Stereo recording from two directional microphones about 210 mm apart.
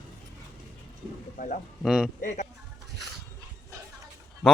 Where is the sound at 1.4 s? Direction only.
40° left (ahead or behind).